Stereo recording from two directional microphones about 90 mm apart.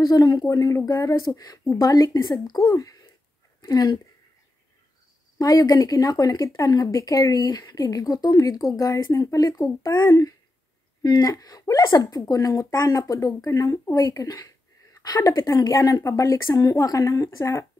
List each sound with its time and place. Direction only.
0.0 s speech: 45° left (ahead or behind)
5.4 s speech: 45° left (ahead or behind)